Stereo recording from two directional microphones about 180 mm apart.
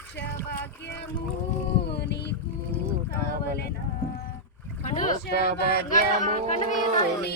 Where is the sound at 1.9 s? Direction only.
70° left (ahead or behind).